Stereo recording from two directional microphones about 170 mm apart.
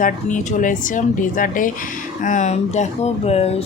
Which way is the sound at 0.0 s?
50° left (ahead or behind).